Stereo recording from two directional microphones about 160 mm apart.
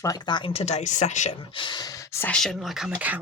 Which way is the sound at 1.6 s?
30° left (ahead or behind).